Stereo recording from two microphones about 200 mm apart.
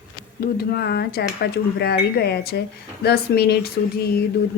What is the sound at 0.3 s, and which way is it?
Speech, 50° left (ahead or behind).